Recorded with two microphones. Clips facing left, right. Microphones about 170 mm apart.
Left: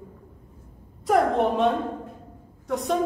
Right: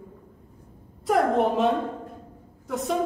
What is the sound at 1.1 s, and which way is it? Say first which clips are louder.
A woman's voice: left 1 dB; centre (ahead or behind).